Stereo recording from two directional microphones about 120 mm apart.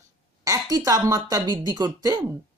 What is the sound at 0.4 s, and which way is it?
Speech, 30° right (ahead or behind).